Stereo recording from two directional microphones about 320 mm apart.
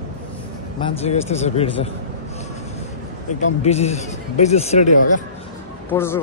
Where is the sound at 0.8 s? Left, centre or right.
Centre.